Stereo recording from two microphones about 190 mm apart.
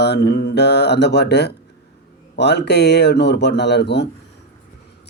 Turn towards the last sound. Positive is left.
turn(degrees=65)  # may be behind; listen again after turning